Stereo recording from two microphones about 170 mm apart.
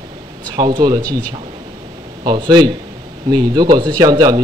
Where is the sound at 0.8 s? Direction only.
25° right (ahead or behind).